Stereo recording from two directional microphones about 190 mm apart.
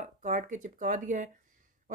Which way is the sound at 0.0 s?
40° right (ahead or behind).